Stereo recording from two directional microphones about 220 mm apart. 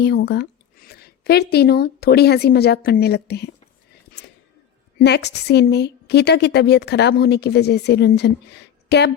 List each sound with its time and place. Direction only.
0.3 s speech: 45° left (ahead or behind)
4.9 s a woman's voice: 50° left (ahead or behind)